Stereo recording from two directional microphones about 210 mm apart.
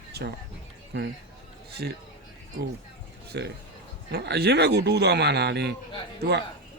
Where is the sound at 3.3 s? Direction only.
55° right (ahead or behind).